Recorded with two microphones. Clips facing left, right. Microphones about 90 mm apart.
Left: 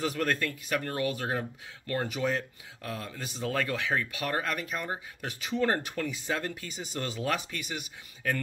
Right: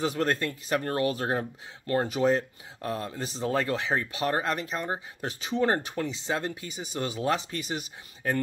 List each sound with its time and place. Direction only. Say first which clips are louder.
0.0 s speech: right 2 dB; 25° right (ahead or behind)